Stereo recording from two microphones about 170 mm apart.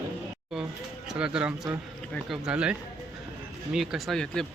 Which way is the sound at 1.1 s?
5° right (ahead or behind).